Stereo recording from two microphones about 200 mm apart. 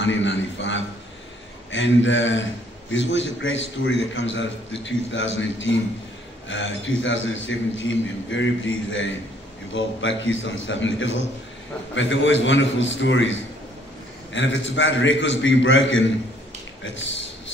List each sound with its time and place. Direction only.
0.0 s a man's voice: 65° left (ahead or behind)
6.5 s a man's voice: 70° left (ahead or behind)